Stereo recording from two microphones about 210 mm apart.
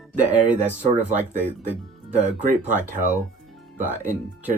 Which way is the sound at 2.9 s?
40° right (ahead or behind).